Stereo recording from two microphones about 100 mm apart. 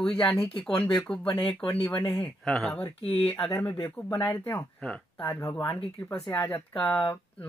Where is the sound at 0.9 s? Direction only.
10° left (ahead or behind).